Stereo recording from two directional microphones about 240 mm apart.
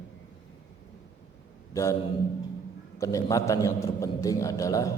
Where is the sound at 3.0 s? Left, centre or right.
Centre.